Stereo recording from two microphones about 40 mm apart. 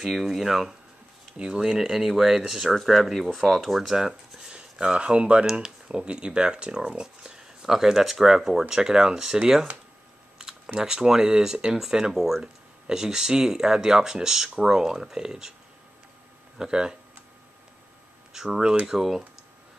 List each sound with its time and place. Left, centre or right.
0.0 s speech: centre
1.3 s speech: right
1.8 s speech: centre
4.5 s speech: right
10.8 s speech: centre
16.5 s speech: centre
18.3 s speech: centre